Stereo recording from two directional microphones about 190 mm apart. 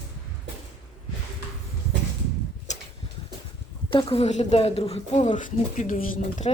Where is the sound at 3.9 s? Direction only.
25° left (ahead or behind).